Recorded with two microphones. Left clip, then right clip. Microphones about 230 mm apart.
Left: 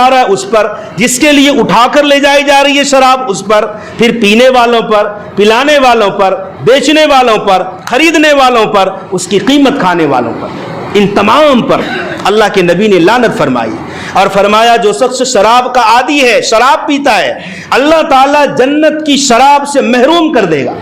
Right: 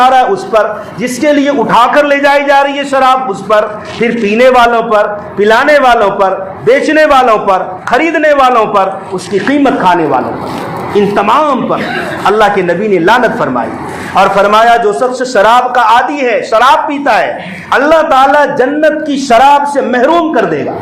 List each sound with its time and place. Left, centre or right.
0.0 s a sound: left
1.0 s a man's voice: left
6.7 s a man's voice: left